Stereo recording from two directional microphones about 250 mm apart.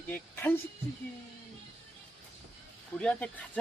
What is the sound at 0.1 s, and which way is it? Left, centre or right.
Speech, centre.